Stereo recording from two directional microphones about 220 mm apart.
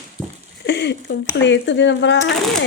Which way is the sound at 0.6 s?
50° left (ahead or behind).